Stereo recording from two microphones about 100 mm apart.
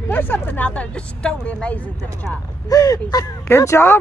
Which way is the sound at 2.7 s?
35° left (ahead or behind).